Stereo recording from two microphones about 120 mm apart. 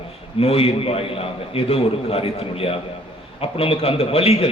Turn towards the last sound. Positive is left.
turn(degrees=55)  # may be behind; listen again after turning